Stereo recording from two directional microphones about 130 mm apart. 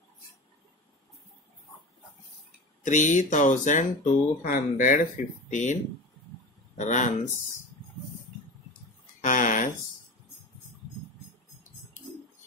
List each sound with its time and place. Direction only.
2.8 s speech: 75° left (ahead or behind)
6.8 s speech: 70° left (ahead or behind)
9.2 s a sound: 90° left